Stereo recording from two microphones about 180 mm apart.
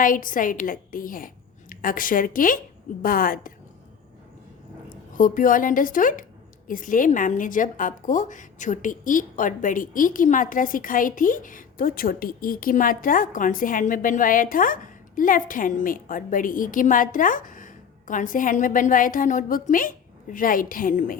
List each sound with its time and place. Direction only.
0.0 s a woman's voice: 50° left (ahead or behind)
4.9 s a woman's voice: 50° left (ahead or behind)